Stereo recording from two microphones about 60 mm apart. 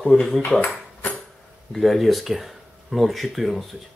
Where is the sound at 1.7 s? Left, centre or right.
Centre.